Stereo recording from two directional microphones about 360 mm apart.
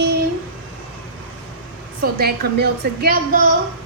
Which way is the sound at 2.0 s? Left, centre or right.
Right.